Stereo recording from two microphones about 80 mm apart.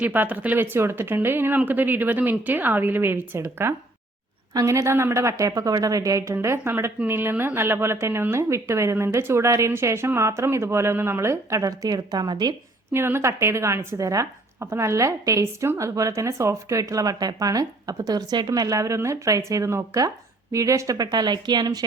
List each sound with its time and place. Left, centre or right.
0.0 s a woman's voice: right
4.5 s speech: right
6.3 s a woman's voice: right
12.9 s a woman's voice: right